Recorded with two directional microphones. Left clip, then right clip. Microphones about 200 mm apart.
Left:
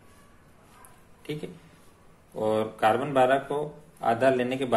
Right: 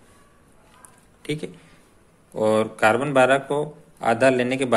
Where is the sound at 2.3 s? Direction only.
30° right (ahead or behind).